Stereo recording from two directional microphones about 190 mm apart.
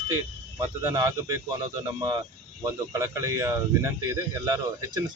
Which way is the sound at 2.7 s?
15° right (ahead or behind).